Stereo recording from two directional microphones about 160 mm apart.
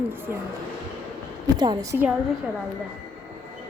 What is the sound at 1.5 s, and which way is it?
Speech, 25° right (ahead or behind).